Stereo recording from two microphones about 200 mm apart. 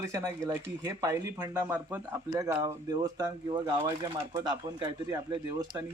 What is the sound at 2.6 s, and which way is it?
Speech, 20° right (ahead or behind).